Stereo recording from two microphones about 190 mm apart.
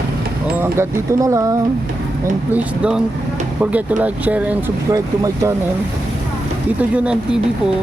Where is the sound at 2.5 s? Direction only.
5° right (ahead or behind).